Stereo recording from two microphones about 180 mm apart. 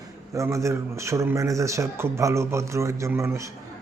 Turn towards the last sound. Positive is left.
turn(degrees=-15)  # may be behind; listen again after turning